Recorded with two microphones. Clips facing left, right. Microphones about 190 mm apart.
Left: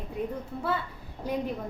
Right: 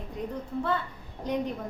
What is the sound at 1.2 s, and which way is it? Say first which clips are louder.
Speech: right 1 dB; 10° left (ahead or behind).